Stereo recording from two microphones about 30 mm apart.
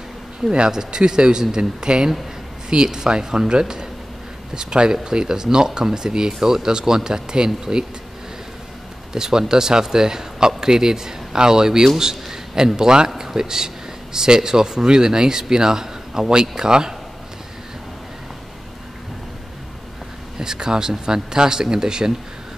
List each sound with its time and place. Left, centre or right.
0.7 s speech: right
9.1 s a man's voice: right
20.3 s speech: right